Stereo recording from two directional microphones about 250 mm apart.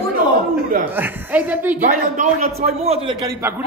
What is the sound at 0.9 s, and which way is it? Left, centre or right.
Speech, centre.